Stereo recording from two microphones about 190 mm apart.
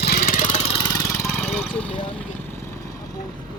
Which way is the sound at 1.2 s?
5° left (ahead or behind).